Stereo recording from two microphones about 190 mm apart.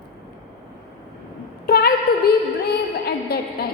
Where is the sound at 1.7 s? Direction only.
55° left (ahead or behind).